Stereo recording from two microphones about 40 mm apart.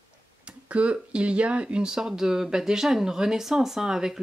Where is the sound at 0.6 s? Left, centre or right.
Right.